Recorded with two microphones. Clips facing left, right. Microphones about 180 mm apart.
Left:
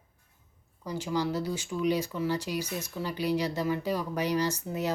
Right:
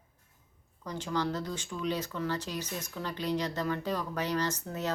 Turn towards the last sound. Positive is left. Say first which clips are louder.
# left 3 dB
turn(degrees=10)  # may be behind; listen again after turning